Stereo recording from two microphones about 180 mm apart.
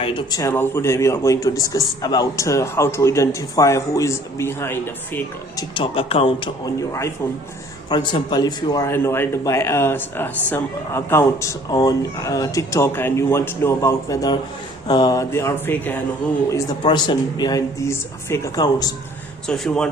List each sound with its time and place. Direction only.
0.0 s a man's voice: 25° left (ahead or behind)
5.7 s speech: 30° left (ahead or behind)
7.9 s a man's voice: 25° left (ahead or behind)
19.5 s speech: 5° left (ahead or behind)